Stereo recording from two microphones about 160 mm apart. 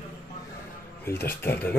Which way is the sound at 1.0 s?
15° left (ahead or behind).